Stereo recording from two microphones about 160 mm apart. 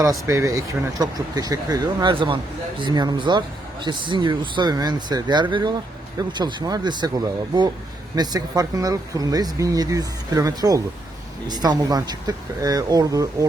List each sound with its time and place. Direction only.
0.0 s speech: 20° right (ahead or behind)
8.1 s speech: 25° right (ahead or behind)